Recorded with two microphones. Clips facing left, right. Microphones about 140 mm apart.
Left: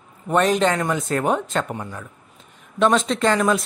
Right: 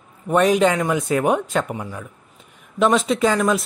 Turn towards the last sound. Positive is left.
turn(degrees=-5)  # may be behind; listen again after turning